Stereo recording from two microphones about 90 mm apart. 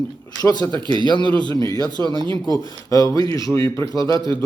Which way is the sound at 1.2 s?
65° right (ahead or behind).